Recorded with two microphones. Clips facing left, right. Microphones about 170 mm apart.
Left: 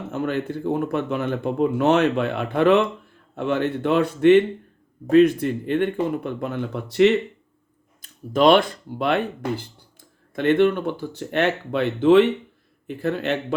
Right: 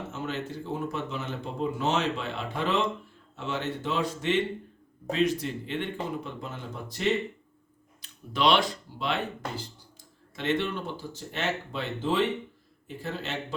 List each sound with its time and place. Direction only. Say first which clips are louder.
0.1 s speech: left 13 dB; 55° left (ahead or behind); by 7.1 s 75° left (ahead or behind)
8.0 s speech: left 9 dB; 45° left (ahead or behind)